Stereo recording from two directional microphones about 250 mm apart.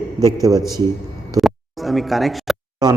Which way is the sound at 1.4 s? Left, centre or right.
Centre.